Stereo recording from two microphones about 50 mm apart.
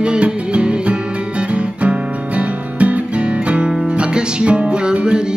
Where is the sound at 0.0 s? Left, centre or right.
Right.